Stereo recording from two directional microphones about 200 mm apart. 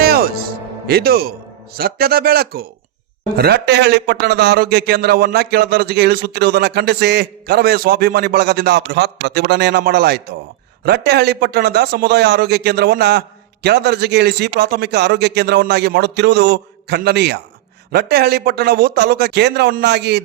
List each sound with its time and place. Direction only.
0.0 s music: 50° right (ahead or behind)
1.7 s a man's voice: 50° right (ahead or behind)